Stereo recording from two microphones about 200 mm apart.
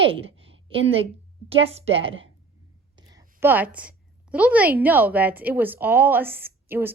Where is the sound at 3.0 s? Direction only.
15° right (ahead or behind).